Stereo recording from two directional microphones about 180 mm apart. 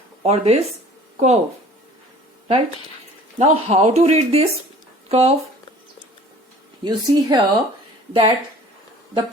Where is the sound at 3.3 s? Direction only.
40° right (ahead or behind).